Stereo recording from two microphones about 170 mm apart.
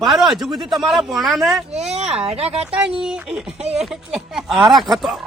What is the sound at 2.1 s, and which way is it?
Speech, 35° right (ahead or behind).